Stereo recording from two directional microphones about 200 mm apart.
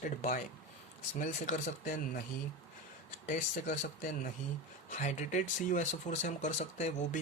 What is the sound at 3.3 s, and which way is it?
Speech, 40° left (ahead or behind).